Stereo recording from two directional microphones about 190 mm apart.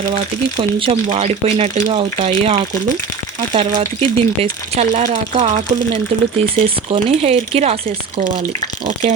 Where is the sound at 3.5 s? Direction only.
30° right (ahead or behind).